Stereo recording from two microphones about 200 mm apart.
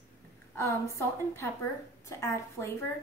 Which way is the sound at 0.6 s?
15° left (ahead or behind).